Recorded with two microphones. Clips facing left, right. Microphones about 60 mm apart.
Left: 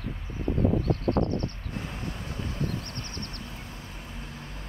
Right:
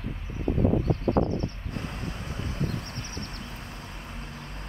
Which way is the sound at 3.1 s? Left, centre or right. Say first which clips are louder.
Right 1 dB; left.